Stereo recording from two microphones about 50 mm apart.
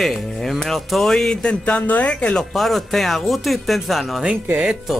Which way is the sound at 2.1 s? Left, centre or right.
Centre.